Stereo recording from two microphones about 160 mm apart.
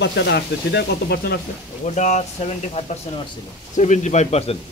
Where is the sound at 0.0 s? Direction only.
90° left.